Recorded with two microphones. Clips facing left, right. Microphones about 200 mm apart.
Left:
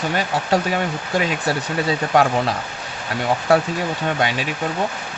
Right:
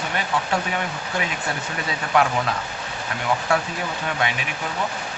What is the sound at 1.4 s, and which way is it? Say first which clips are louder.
Speech: left 7 dB; 35° left (ahead or behind).